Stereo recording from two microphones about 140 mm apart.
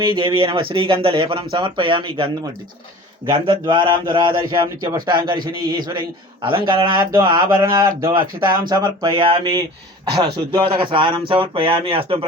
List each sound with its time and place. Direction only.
0.0 s speech: 35° right (ahead or behind)
7.3 s speech: 25° right (ahead or behind)
10.8 s speech: 35° right (ahead or behind)